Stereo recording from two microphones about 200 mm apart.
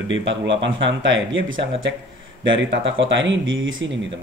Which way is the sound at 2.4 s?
70° right (ahead or behind).